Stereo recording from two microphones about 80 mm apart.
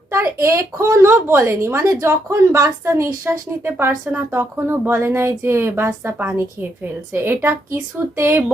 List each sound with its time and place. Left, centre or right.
0.1 s speech: right